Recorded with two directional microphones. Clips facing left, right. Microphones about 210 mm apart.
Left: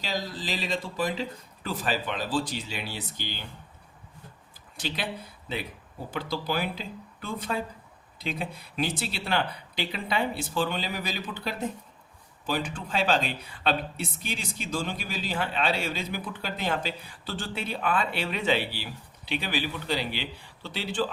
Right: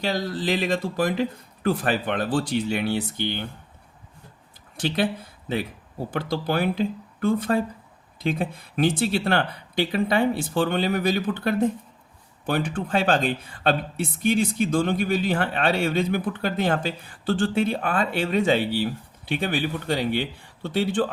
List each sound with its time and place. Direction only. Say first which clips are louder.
0.0 s speech: right 7 dB; 55° right (ahead or behind)
6.1 s speech: right 5 dB; 55° right (ahead or behind)